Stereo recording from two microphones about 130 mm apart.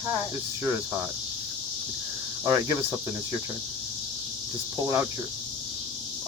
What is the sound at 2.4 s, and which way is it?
Speech, 25° right (ahead or behind).